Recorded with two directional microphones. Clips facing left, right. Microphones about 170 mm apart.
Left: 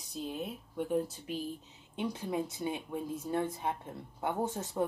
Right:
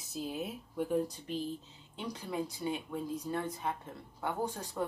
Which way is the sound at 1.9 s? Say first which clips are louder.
Left 3 dB; 25° left (ahead or behind).